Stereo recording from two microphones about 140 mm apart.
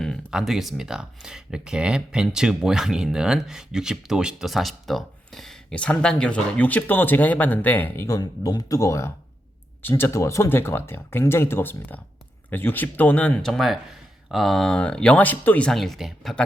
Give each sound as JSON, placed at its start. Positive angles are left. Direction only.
{"t": 0.0, "sound": "speech", "side_deg": 5}